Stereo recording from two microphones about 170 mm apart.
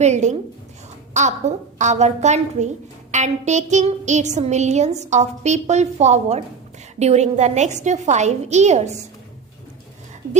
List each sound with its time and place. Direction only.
0.0 s speech: 40° right (ahead or behind)
10.2 s speech: 60° right (ahead or behind)